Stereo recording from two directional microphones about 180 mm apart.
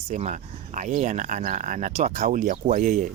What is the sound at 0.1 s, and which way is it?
Speech, 40° right (ahead or behind).